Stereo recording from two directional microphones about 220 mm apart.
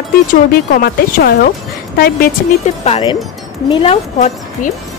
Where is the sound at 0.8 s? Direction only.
45° left (ahead or behind); by 4.3 s 25° left (ahead or behind).